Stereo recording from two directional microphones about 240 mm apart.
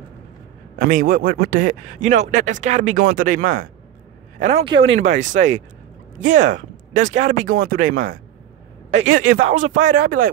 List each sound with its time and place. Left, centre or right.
0.7 s a man's voice: right